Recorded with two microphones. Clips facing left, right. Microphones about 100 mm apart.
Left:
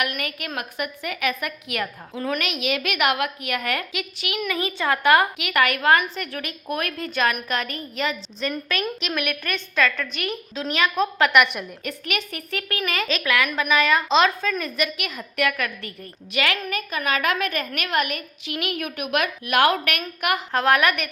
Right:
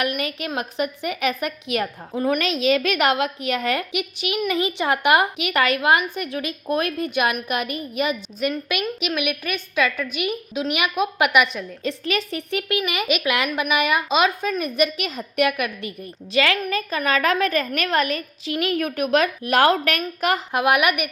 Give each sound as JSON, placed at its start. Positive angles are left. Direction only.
{"t": 0.2, "sound": "a woman's voice", "side_deg": -25}
{"t": 11.8, "sound": "a woman's voice", "side_deg": -30}
{"t": 14.6, "sound": "a woman's voice", "side_deg": -25}
{"t": 16.3, "sound": "a woman's voice", "side_deg": -30}
{"t": 20.5, "sound": "a woman's voice", "side_deg": -15}